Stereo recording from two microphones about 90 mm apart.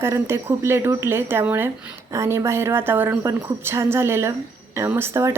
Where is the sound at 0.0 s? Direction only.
30° right (ahead or behind).